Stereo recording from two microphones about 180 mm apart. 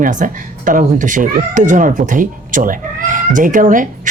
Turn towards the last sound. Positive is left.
turn(degrees=-45)  # may be behind; listen again after turning